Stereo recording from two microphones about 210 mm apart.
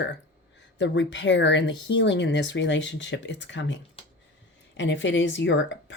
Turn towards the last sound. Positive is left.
turn(degrees=60)  # may be behind; listen again after turning